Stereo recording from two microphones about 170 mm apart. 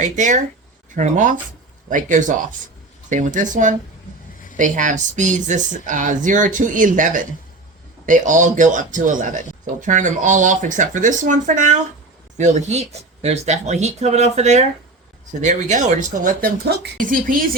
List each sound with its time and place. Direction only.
0.0 s speech: 45° right (ahead or behind)